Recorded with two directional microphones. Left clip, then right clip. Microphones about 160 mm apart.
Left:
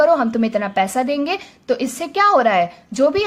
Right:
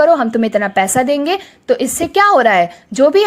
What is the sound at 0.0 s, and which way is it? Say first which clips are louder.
A woman's voice: right 4 dB; 30° right (ahead or behind).